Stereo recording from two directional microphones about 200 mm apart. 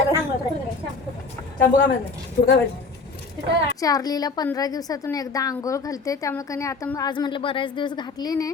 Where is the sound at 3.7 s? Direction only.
20° left (ahead or behind).